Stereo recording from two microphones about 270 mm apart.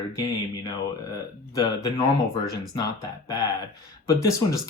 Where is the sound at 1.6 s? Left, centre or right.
Centre.